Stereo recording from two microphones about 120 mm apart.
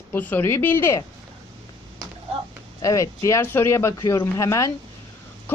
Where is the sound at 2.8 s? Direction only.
25° left (ahead or behind).